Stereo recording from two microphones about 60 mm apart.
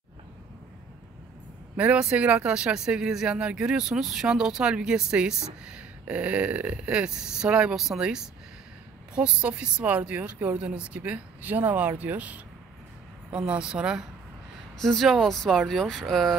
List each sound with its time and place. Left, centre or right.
1.8 s speech: centre
7.7 s speech: centre
9.2 s speech: centre
14.8 s speech: centre